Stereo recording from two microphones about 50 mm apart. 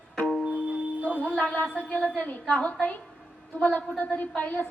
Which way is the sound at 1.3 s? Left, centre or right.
Centre.